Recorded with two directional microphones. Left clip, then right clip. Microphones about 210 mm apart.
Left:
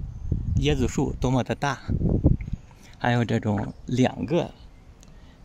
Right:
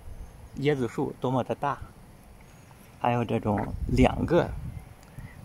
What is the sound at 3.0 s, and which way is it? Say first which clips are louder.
Speech: left 2 dB; 15° left (ahead or behind).